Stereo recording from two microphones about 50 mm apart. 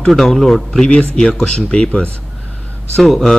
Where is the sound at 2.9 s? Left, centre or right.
Centre.